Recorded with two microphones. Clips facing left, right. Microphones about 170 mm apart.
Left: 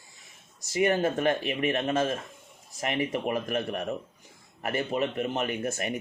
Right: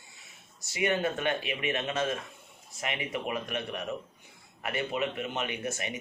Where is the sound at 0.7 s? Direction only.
40° left (ahead or behind).